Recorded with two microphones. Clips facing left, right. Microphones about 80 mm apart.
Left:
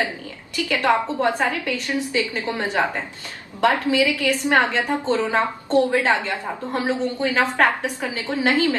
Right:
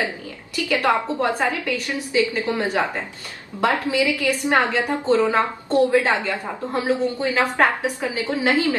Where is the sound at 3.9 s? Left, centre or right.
Right.